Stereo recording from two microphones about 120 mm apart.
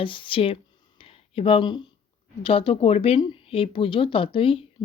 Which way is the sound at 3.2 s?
45° left (ahead or behind).